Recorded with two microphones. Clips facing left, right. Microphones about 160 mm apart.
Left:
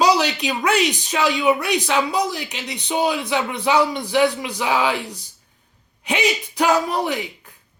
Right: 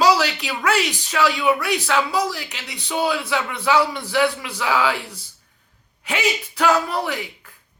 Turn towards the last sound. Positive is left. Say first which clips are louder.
# left 2 dB
turn(degrees=20)  # may be behind; listen again after turning